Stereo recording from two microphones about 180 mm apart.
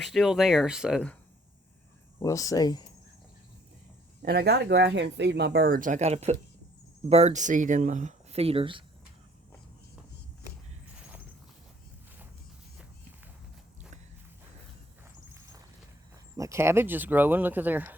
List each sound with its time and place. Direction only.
0.0 s speech: centre (ahead or behind)
2.1 s speech: 15° left (ahead or behind)
4.3 s speech: 65° right (ahead or behind); by 8.8 s 30° right (ahead or behind)
16.4 s speech: 15° right (ahead or behind)